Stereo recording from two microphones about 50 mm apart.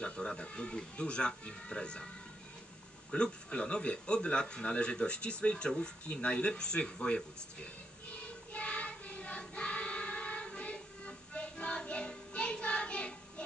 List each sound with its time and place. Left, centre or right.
0.0 s speech: centre
3.1 s speech: centre
9.4 s choir: left